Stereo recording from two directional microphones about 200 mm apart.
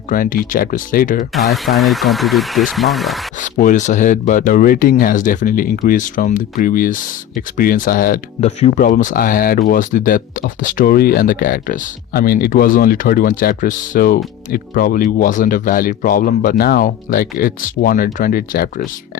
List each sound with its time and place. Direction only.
0.1 s speech: 45° left (ahead or behind)
1.3 s speech: centre (ahead or behind)
3.4 s speech: 40° left (ahead or behind)